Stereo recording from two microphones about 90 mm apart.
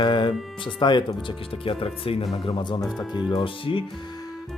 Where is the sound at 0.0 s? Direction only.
60° left (ahead or behind).